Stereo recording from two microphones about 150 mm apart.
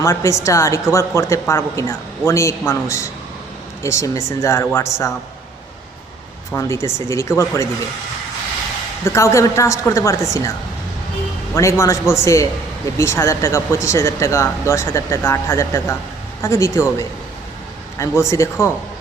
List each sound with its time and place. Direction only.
0.0 s speech: 20° left (ahead or behind)
6.5 s speech: 20° left (ahead or behind)
9.0 s speech: 20° left (ahead or behind)
11.5 s speech: 20° left (ahead or behind)